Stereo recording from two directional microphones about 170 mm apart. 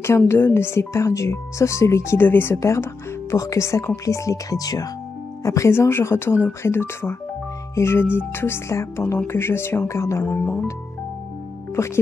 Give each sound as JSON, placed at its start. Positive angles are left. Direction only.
{"t": 0.3, "sound": "speech", "side_deg": 15}
{"t": 11.7, "sound": "speech", "side_deg": 15}